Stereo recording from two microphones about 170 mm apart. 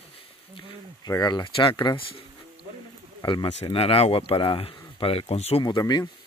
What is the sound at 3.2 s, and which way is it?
Speech, 30° left (ahead or behind).